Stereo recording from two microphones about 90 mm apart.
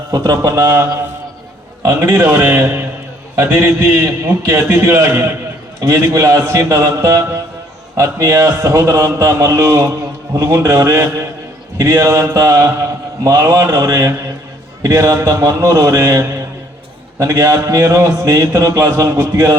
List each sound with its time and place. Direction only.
0.1 s a man's voice: 35° right (ahead or behind)
5.8 s speech: 40° right (ahead or behind)